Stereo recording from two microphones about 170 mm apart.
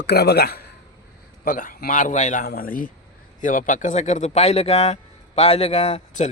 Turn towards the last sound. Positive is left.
turn(degrees=40)  # may be behind; listen again after turning